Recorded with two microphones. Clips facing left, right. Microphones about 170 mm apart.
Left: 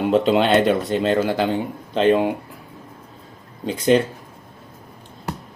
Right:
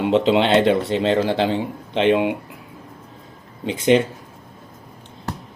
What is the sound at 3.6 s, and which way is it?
Speech, 20° right (ahead or behind).